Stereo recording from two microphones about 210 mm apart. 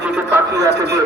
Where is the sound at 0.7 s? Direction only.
50° right (ahead or behind).